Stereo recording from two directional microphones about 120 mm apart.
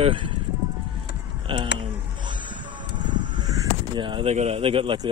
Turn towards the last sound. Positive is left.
turn(degrees=-50)  # may be behind; listen again after turning